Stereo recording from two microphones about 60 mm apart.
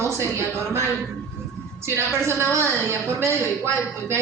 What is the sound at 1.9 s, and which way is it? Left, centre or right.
A woman's voice, right.